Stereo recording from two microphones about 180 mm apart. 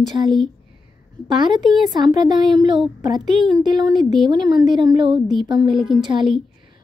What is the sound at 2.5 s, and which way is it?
Speech, 25° right (ahead or behind).